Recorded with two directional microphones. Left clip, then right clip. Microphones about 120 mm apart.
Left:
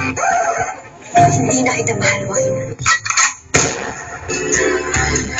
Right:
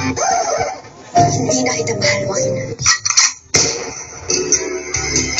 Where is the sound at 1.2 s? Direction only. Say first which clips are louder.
Left 2 dB; 30° right (ahead or behind).